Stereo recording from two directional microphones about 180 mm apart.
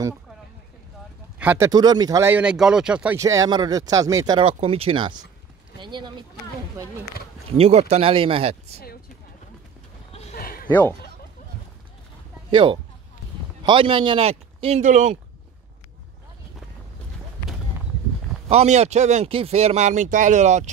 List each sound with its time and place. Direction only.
1.4 s speech: 10° right (ahead or behind)
1.7 s speech: 20° right (ahead or behind)
2.3 s speech: 5° right (ahead or behind)
3.2 s speech: 15° right (ahead or behind)
4.4 s a man's voice: 30° right (ahead or behind)
7.5 s a man's voice: 35° right (ahead or behind)
10.3 s a sound: 55° left (ahead or behind)
12.4 s a man's voice: 30° right (ahead or behind)
18.5 s a man's voice: 35° right (ahead or behind)